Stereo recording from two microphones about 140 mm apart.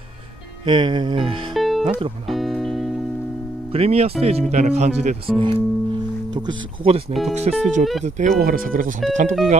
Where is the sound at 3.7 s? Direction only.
45° right (ahead or behind).